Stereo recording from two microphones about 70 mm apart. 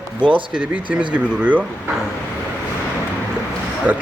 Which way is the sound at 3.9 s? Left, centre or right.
Right.